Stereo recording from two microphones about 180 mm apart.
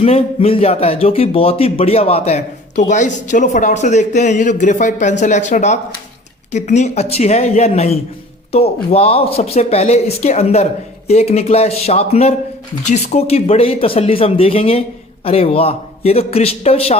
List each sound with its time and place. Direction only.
0.0 s speech: 35° left (ahead or behind)